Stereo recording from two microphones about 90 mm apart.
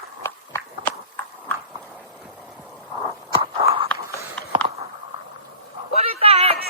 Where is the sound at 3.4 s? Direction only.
75° right (ahead or behind).